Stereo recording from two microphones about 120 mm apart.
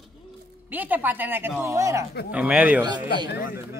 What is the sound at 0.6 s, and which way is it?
A woman's voice, 15° right (ahead or behind).